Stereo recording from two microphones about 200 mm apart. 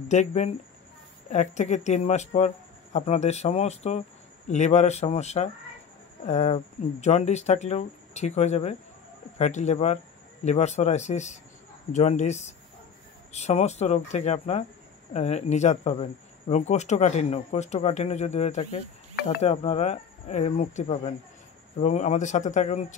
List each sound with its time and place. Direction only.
0.1 s speech: 35° left (ahead or behind)